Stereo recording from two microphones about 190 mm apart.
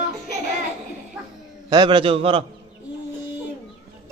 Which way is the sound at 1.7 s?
25° right (ahead or behind).